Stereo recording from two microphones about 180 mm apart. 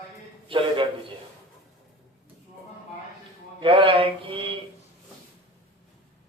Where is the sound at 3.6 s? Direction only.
30° right (ahead or behind).